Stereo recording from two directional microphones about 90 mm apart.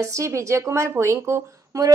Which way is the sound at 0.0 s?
35° right (ahead or behind).